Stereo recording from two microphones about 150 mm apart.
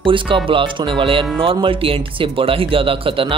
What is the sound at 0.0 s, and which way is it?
Speech, 35° right (ahead or behind).